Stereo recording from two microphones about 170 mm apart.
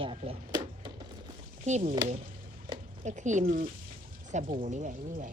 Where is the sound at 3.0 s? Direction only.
45° right (ahead or behind).